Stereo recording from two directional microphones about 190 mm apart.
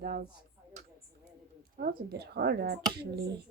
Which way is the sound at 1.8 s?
55° right (ahead or behind).